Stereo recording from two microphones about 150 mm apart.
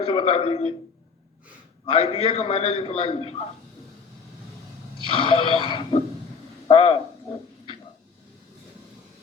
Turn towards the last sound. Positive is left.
turn(degrees=35)  # may be behind; listen again after turning